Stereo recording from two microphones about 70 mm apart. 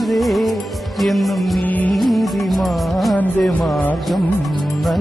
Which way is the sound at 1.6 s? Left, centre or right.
Left.